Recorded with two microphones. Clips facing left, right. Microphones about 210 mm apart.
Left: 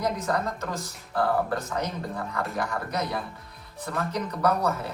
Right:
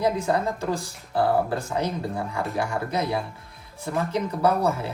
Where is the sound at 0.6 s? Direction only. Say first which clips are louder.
Right 6 dB; 30° right (ahead or behind).